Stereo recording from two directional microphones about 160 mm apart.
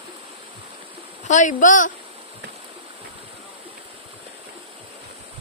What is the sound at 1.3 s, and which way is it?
Speech, 50° left (ahead or behind).